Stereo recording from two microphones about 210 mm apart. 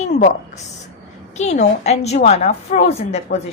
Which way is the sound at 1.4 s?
30° left (ahead or behind).